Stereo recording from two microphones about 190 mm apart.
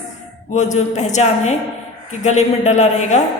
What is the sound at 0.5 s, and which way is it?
Music, 40° left (ahead or behind).